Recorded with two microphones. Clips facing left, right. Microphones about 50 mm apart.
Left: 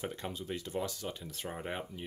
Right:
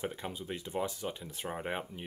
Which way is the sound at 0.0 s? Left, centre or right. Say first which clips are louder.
Right 1 dB; centre.